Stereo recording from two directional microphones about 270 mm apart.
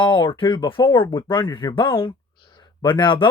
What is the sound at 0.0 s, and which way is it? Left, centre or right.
Speech, centre.